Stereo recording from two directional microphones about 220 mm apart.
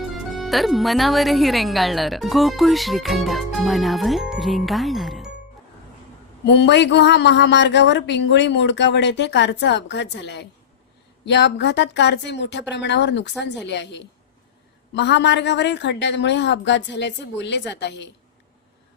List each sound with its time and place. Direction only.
0.3 s speech: centre (ahead or behind)
6.4 s speech: 50° left (ahead or behind)